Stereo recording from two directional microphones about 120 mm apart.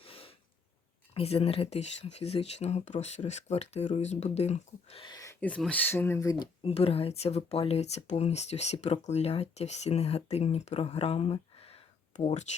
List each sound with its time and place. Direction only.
0.0 s snort: 50° left (ahead or behind)
1.1 s speech: 55° left (ahead or behind)
5.0 s speech: 30° left (ahead or behind)
5.3 s speech: 10° left (ahead or behind); by 6.5 s 30° left (ahead or behind)
6.6 s speech: 55° left (ahead or behind); by 12.5 s 75° left (ahead or behind)